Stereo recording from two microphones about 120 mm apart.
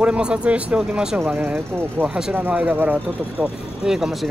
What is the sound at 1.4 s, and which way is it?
Speech, 15° right (ahead or behind).